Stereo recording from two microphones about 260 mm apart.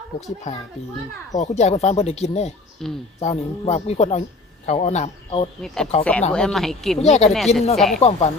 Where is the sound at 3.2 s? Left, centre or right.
Left.